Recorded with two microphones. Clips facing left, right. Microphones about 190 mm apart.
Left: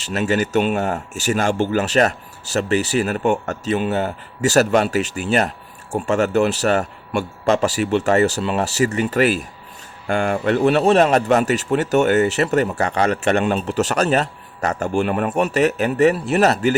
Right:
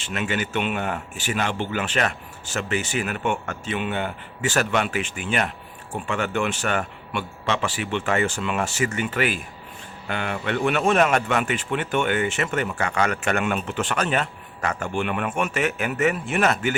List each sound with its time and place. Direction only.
0.0 s speech: 40° left (ahead or behind)